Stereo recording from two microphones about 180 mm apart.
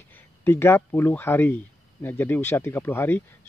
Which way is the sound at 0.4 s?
15° left (ahead or behind).